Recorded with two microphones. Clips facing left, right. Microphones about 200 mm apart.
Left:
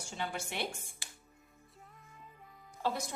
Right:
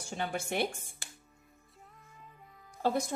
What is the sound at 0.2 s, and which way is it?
Speech, 50° right (ahead or behind).